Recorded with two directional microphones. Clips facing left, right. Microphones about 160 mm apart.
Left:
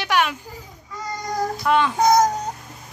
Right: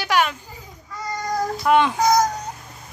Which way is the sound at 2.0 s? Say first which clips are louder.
Left 2 dB; 25° left (ahead or behind).